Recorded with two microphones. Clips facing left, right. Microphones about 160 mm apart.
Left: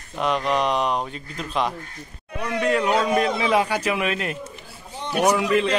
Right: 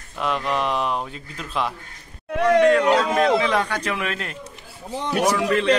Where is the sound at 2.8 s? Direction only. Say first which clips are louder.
Right 2 dB; 90° right.